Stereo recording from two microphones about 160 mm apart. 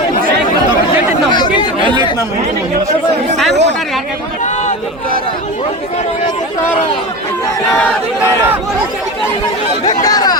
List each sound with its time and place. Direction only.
1.3 s chatter: 25° left (ahead or behind)
3.5 s a woman's voice: 90° right
10.0 s speech: 25° left (ahead or behind)